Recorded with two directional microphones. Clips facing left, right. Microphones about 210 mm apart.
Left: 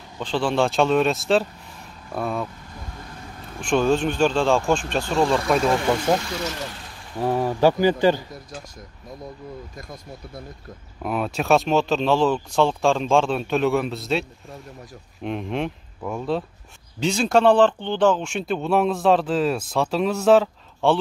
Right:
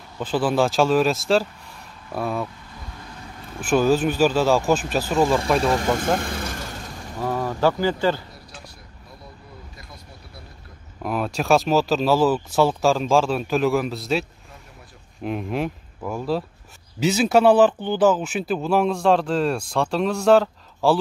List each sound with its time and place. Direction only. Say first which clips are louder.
0.2 s speech: right 1 dB; 5° right (ahead or behind)
3.6 s speech: right 1 dB; 5° right (ahead or behind)
6.1 s speech: left 1 dB; 50° right (ahead or behind)
7.2 s speech: left 3 dB; 15° left (ahead or behind)
9.8 s speech: left 7 dB; 45° left (ahead or behind)
11.0 s speech: even; centre (ahead or behind)
15.2 s speech: right 1 dB; 5° right (ahead or behind)